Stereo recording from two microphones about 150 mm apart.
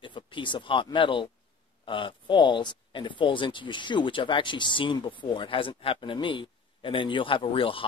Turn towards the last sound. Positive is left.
turn(degrees=35)  # may be behind; listen again after turning